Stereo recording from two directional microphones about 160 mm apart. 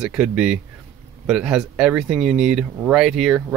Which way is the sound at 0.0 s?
5° right (ahead or behind).